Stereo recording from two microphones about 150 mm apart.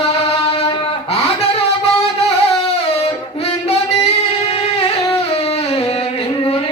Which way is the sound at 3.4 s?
45° left (ahead or behind).